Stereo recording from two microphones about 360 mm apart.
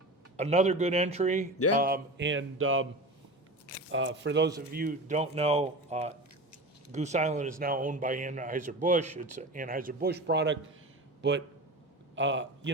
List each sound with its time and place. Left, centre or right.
0.3 s speech: centre
1.8 s a sound: right
3.9 s a man's voice: right